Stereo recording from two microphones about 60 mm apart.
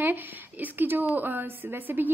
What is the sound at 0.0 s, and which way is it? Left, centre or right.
A woman's voice, right.